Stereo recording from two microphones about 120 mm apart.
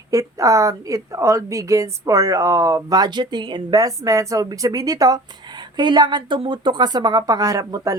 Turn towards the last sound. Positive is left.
turn(degrees=-30)  # may be behind; listen again after turning